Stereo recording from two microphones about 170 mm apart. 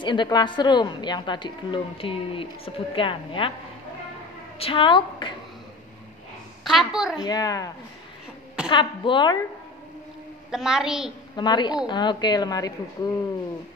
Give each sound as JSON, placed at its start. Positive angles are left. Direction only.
{"t": 0.0, "sound": "a woman's voice", "side_deg": 25}
{"t": 4.6, "sound": "a woman's voice", "side_deg": 30}
{"t": 6.6, "sound": "a woman's voice", "side_deg": 0}
{"t": 7.2, "sound": "a woman's voice", "side_deg": 20}
{"t": 10.5, "sound": "a woman's voice", "side_deg": -5}
{"t": 11.3, "sound": "a woman's voice", "side_deg": 25}